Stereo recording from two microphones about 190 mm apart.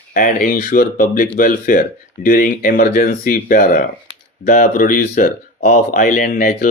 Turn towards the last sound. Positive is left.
turn(degrees=45)  # may be behind; listen again after turning